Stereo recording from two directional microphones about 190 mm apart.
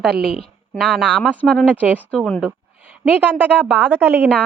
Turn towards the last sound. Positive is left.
turn(degrees=-10)  # may be behind; listen again after turning